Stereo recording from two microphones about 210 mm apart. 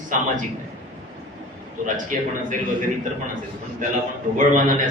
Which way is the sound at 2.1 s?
35° right (ahead or behind).